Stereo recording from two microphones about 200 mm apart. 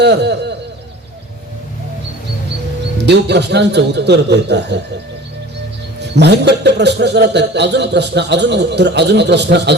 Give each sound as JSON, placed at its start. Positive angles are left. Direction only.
{"t": 0.0, "sound": "speech", "side_deg": -55}
{"t": 3.0, "sound": "speech", "side_deg": -60}
{"t": 6.0, "sound": "speech", "side_deg": -60}